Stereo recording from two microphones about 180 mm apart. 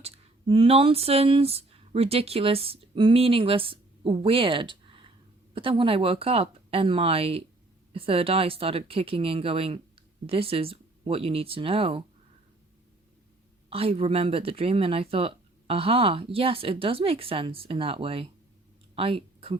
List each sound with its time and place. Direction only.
0.0 s speech: 30° right (ahead or behind)
13.7 s speech: 35° right (ahead or behind)